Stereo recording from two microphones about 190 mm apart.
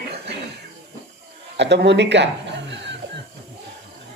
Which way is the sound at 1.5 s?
65° right (ahead or behind).